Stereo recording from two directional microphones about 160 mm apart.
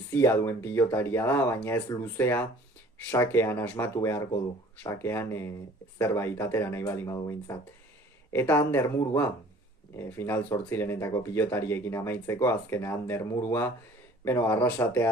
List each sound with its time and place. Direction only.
0.1 s speech: 15° left (ahead or behind)
9.9 s speech: 15° left (ahead or behind)